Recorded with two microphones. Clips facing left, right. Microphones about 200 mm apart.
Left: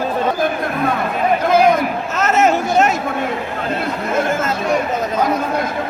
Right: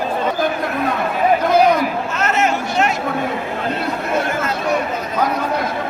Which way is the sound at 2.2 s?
40° left (ahead or behind).